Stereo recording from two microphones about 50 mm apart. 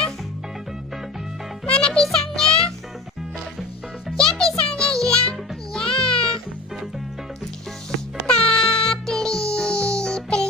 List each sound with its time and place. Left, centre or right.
1.7 s music: left
4.4 s music: centre
8.3 s music: centre